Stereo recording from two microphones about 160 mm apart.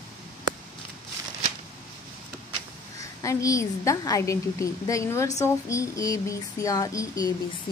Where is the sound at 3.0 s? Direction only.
20° left (ahead or behind).